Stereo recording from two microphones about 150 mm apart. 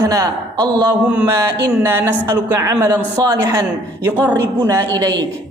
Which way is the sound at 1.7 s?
15° right (ahead or behind).